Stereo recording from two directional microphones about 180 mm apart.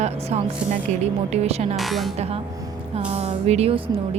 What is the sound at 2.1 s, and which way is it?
Speech, 35° right (ahead or behind).